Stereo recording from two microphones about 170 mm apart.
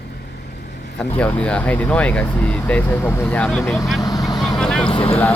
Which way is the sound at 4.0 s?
25° left (ahead or behind).